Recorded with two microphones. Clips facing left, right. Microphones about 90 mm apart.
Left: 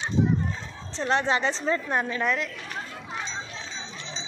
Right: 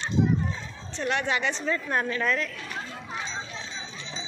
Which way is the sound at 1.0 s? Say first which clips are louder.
Left 3 dB; 30° left (ahead or behind).